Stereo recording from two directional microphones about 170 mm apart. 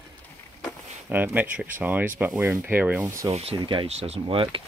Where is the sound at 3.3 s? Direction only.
30° right (ahead or behind).